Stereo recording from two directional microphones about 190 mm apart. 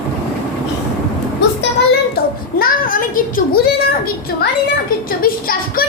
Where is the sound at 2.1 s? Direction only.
50° left (ahead or behind).